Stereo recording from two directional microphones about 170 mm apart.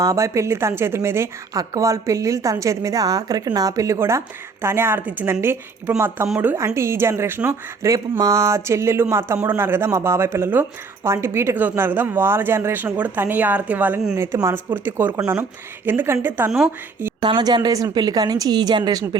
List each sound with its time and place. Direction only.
0.0 s a woman's voice: 20° right (ahead or behind)
16.5 s speech: centre (ahead or behind)
17.2 s a woman's voice: 25° right (ahead or behind)